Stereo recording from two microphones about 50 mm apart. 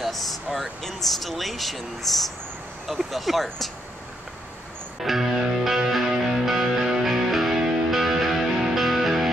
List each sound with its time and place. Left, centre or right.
0.0 s air conditioning: centre
0.6 s speech: centre
5.0 s music: centre